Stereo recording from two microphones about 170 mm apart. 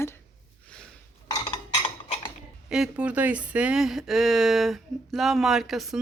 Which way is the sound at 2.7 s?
5° right (ahead or behind).